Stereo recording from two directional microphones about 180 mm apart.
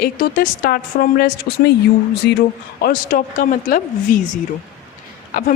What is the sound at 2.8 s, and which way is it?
A woman's voice, 50° left (ahead or behind).